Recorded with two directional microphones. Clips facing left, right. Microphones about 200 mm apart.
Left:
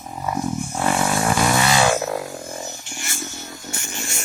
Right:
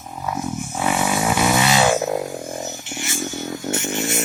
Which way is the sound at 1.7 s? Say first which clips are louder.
Right 1 dB; 20° right (ahead or behind).